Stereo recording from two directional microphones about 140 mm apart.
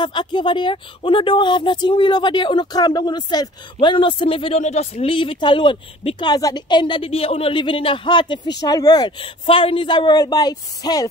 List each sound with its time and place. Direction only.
0.0 s speech: 35° left (ahead or behind)